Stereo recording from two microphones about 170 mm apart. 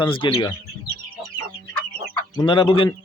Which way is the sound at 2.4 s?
30° left (ahead or behind).